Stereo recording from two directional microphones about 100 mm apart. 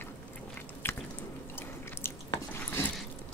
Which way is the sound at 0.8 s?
25° left (ahead or behind).